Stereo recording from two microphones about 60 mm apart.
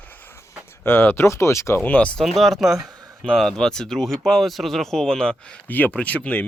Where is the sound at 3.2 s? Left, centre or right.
Centre.